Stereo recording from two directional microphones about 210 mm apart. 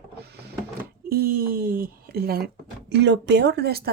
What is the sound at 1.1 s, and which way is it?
Speech, 45° right (ahead or behind).